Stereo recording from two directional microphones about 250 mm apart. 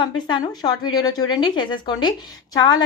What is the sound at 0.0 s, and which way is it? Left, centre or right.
A woman's voice, centre.